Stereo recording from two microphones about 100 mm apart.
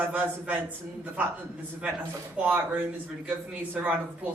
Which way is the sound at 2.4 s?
20° right (ahead or behind).